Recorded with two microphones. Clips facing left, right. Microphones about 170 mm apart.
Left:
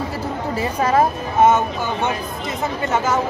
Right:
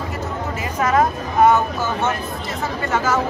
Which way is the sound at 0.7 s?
30° left (ahead or behind).